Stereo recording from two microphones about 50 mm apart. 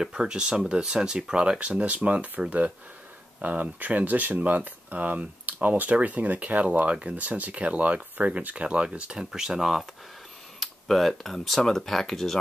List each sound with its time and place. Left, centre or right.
0.0 s speech: centre
9.3 s speech: centre